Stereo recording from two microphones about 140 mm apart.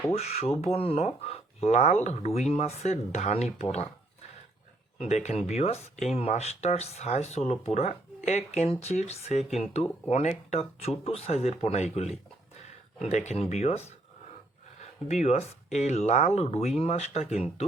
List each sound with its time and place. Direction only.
0.1 s speech: 50° left (ahead or behind)
4.9 s speech: 50° left (ahead or behind)
15.0 s speech: 50° left (ahead or behind)